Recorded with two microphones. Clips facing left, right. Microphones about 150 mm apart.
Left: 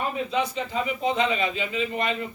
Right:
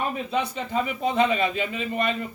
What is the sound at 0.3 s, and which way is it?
A man's voice, 55° right (ahead or behind).